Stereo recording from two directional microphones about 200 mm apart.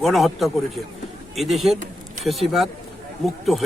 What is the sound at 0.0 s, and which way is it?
A man's voice, centre (ahead or behind).